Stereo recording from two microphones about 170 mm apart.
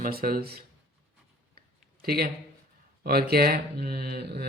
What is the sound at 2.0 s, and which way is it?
Speech, 65° right (ahead or behind).